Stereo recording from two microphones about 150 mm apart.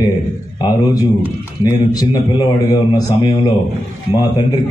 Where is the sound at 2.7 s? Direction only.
25° left (ahead or behind).